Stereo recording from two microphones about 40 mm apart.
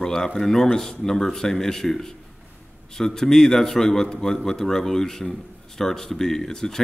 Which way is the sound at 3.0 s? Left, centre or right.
Centre.